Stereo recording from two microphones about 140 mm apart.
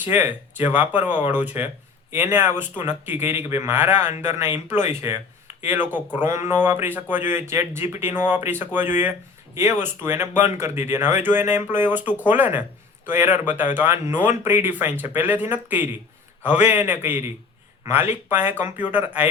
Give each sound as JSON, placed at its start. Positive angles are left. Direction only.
{"t": 0.0, "sound": "speech", "side_deg": -15}